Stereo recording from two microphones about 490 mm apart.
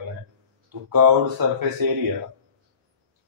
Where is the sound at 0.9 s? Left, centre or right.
Right.